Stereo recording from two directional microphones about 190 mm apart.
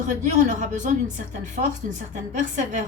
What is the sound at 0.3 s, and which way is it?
A woman's voice, 40° right (ahead or behind).